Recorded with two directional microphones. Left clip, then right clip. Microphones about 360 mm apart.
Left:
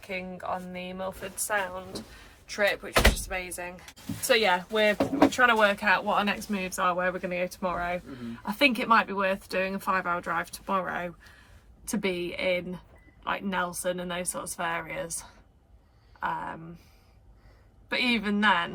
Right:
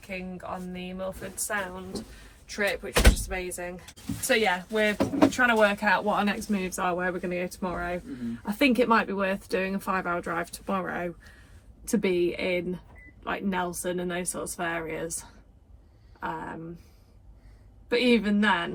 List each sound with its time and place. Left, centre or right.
0.1 s speech: centre
17.8 s speech: centre